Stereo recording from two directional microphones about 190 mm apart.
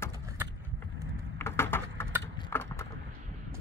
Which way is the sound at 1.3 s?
15° left (ahead or behind).